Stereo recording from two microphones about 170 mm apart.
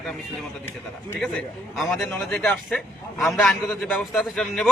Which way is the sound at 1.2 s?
5° left (ahead or behind).